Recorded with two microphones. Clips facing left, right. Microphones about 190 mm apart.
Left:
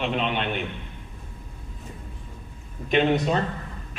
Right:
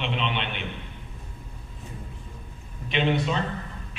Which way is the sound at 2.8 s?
45° left (ahead or behind).